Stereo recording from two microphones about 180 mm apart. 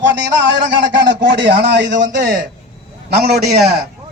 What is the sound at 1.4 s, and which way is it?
A man's voice, 75° right (ahead or behind).